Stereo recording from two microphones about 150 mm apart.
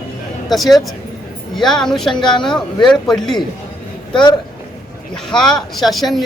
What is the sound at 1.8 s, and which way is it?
Speech, centre (ahead or behind).